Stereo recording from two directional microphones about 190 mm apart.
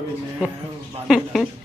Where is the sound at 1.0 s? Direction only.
Centre (ahead or behind).